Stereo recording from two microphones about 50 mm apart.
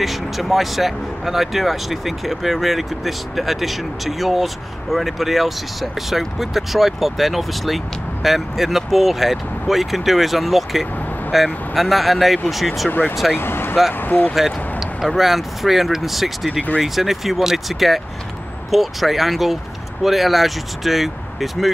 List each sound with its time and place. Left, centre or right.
0.0 s speech: centre
13.4 s vehicle: left
13.9 s speech: left
14.3 s a sound: centre
15.1 s speech: centre